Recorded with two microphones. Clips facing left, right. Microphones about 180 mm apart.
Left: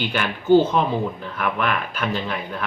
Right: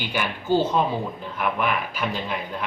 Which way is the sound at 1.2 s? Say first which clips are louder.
Left 1 dB; 15° right (ahead or behind).